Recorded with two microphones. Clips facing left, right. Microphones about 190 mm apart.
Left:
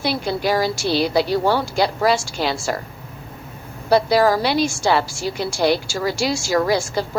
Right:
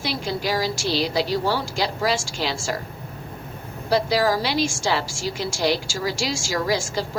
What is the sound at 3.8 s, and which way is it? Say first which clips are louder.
A woman's voice: left 5 dB; 60° left (ahead or behind).